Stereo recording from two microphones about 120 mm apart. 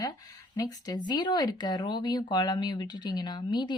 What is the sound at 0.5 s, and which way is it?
Speech, 35° left (ahead or behind).